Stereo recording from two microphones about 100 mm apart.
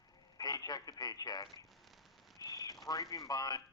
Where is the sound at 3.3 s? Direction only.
40° left (ahead or behind).